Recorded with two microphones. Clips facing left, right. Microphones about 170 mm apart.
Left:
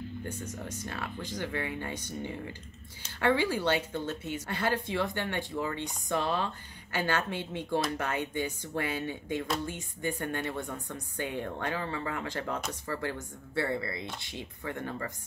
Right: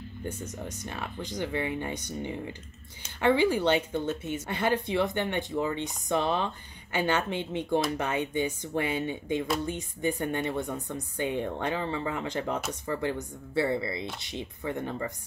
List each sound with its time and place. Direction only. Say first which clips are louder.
0.2 s speech: right 2 dB; 20° right (ahead or behind)